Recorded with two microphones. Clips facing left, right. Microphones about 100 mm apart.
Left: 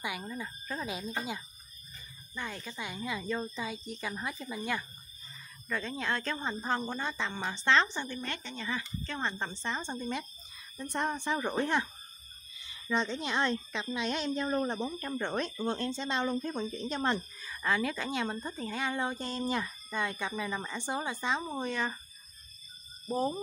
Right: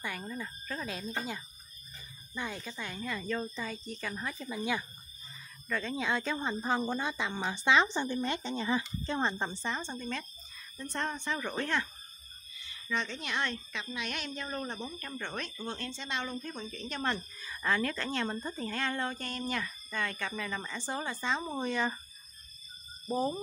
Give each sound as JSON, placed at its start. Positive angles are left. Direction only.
{"t": 0.2, "sound": "a woman's voice", "side_deg": 5}
{"t": 2.3, "sound": "speech", "side_deg": -5}
{"t": 2.7, "sound": "a woman's voice", "side_deg": 10}
{"t": 7.9, "sound": "speech", "side_deg": -20}
{"t": 9.8, "sound": "a woman's voice", "side_deg": 15}
{"t": 15.4, "sound": "speech", "side_deg": 30}
{"t": 16.8, "sound": "a woman's voice", "side_deg": 20}
{"t": 17.4, "sound": "a woman's voice", "side_deg": 0}
{"t": 21.4, "sound": "speech", "side_deg": 0}
{"t": 23.1, "sound": "speech", "side_deg": 0}